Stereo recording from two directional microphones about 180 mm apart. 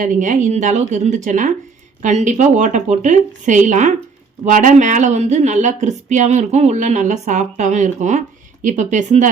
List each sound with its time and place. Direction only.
0.0 s speech: 45° right (ahead or behind)